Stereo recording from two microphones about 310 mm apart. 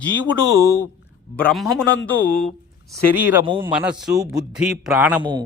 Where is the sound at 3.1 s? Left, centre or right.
Centre.